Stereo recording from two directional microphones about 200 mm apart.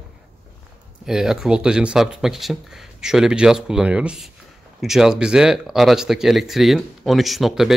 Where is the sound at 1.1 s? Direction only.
Centre (ahead or behind).